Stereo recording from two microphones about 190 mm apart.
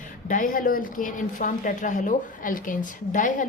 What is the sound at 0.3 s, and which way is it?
A woman's voice, 45° left (ahead or behind).